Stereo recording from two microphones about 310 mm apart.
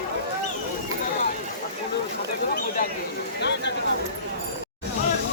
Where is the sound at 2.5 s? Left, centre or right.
Left.